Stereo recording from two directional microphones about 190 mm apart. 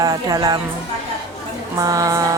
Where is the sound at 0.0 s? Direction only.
20° right (ahead or behind).